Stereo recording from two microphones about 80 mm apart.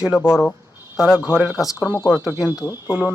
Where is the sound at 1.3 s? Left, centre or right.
Right.